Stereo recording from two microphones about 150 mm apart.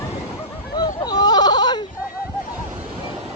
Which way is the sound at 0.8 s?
25° left (ahead or behind).